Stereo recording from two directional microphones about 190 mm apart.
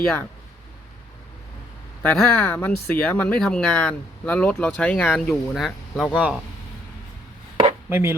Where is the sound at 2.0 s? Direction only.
10° left (ahead or behind).